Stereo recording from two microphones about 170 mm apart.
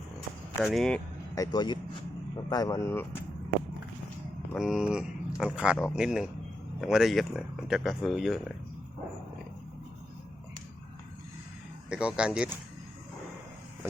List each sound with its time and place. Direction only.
0.6 s speech: centre (ahead or behind)
1.4 s speech: 25° left (ahead or behind)
4.5 s speech: centre (ahead or behind)
11.9 s speech: 5° right (ahead or behind)